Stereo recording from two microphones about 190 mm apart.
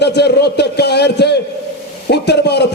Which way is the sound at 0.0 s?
60° left (ahead or behind).